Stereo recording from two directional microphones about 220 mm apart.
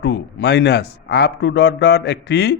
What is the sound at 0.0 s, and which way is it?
Speech, 50° left (ahead or behind).